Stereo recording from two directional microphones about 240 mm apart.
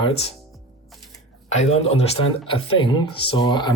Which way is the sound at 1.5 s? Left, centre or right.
Left.